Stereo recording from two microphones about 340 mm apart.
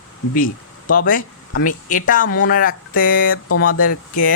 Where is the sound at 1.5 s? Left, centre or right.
Left.